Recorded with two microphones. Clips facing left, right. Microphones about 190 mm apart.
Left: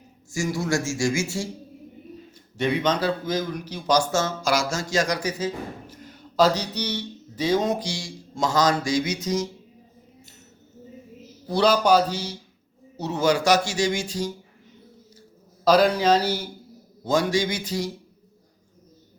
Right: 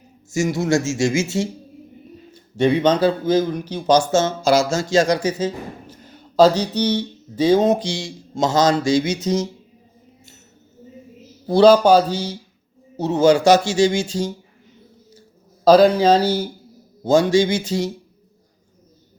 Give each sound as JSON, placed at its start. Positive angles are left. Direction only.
{"t": 0.3, "sound": "speech", "side_deg": -20}
{"t": 11.4, "sound": "speech", "side_deg": -30}
{"t": 15.6, "sound": "speech", "side_deg": -30}